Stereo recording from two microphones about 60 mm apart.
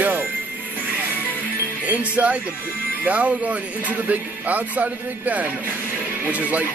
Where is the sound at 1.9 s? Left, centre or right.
Right.